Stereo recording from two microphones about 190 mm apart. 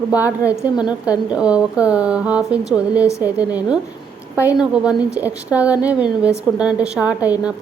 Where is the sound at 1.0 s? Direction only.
5° right (ahead or behind).